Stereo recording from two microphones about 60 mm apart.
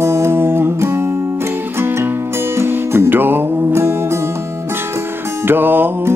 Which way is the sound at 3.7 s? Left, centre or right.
Right.